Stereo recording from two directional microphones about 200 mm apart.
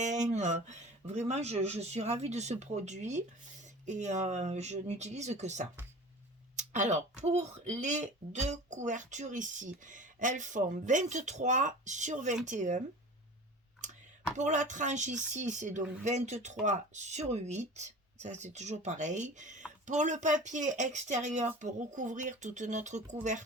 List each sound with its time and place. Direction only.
0.0 s speech: 35° right (ahead or behind)
14.3 s speech: 35° right (ahead or behind)